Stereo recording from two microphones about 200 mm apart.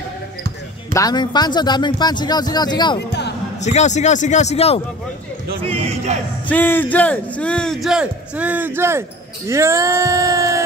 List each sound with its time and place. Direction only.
0.9 s a man's voice: 20° left (ahead or behind)
3.1 s music: 60° left (ahead or behind)
3.6 s a man's voice: 35° left (ahead or behind)
5.6 s speech: 30° right (ahead or behind)
6.5 s a man's voice: 10° left (ahead or behind); by 9.0 s 10° right (ahead or behind)
9.5 s male singing: 15° right (ahead or behind)